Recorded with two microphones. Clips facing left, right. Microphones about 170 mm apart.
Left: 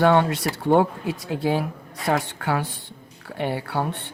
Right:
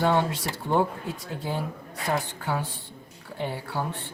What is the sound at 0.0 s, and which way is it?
Speech, 65° left (ahead or behind).